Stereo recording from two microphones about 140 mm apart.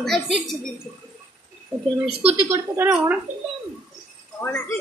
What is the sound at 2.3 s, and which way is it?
Speech, 15° right (ahead or behind).